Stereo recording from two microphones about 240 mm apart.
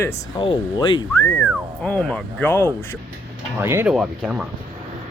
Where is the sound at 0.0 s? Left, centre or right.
Centre.